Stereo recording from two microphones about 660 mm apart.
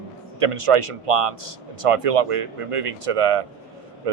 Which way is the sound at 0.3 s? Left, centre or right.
Right.